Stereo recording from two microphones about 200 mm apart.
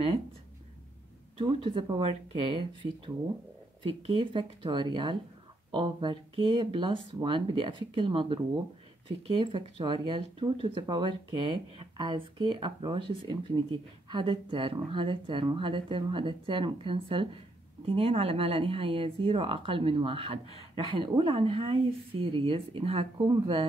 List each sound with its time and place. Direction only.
1.4 s speech: 25° right (ahead or behind)